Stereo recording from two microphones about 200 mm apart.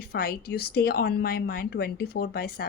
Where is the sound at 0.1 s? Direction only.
50° left (ahead or behind).